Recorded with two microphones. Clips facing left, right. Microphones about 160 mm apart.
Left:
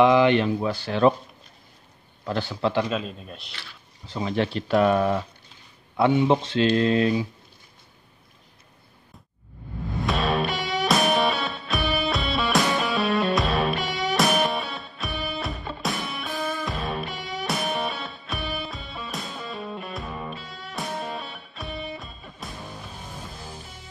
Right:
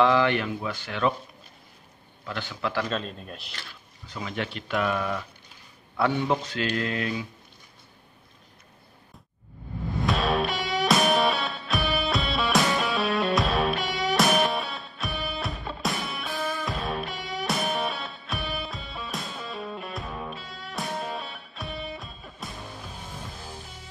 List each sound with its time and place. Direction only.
0.0 s speech: 20° left (ahead or behind)
2.2 s speech: 35° left (ahead or behind)
2.8 s speech: 5° left (ahead or behind)
4.1 s speech: 30° left (ahead or behind)
5.9 s speech: 20° left (ahead or behind)
10.0 s music: centre (ahead or behind)